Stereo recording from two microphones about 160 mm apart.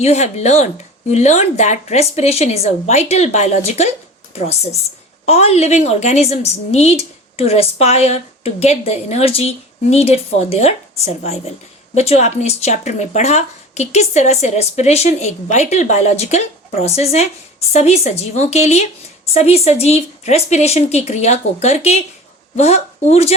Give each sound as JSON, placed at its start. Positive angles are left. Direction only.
{"t": 0.0, "sound": "speech", "side_deg": 45}
{"t": 5.2, "sound": "a woman's voice", "side_deg": 40}